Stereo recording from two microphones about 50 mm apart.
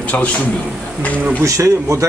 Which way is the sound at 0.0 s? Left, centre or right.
Left.